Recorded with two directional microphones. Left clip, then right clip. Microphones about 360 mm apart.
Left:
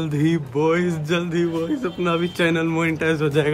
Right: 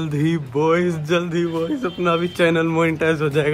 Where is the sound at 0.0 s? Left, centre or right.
Centre.